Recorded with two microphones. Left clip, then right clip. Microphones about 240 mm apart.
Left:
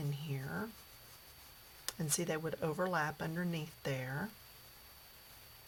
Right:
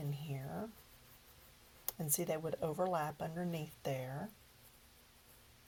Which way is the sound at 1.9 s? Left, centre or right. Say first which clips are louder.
Left 1 dB; centre.